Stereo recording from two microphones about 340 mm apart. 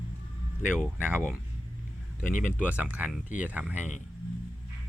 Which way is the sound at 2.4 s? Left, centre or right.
Centre.